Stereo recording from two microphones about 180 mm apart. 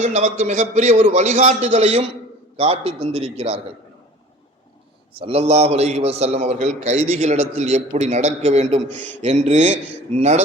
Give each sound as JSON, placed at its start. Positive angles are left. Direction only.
{"t": 0.0, "sound": "a man's voice", "side_deg": -40}
{"t": 5.2, "sound": "a man's voice", "side_deg": -35}